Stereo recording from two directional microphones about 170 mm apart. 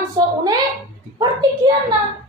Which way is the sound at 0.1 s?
20° right (ahead or behind).